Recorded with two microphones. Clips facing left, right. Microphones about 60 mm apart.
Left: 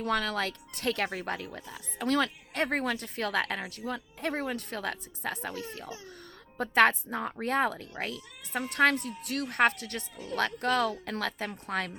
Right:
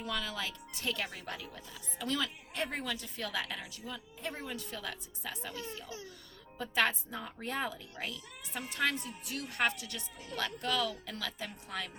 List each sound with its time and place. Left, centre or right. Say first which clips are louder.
0.0 s a woman's voice: left 8 dB; left